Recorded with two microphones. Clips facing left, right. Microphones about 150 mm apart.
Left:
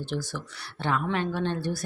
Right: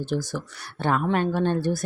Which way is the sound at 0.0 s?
40° right (ahead or behind).